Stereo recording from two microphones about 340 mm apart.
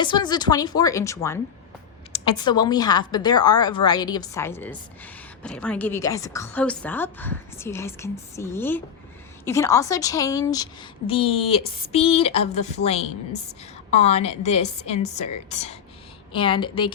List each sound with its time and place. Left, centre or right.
0.0 s a woman's voice: centre